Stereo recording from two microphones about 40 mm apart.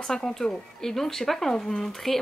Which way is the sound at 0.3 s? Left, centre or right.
Centre.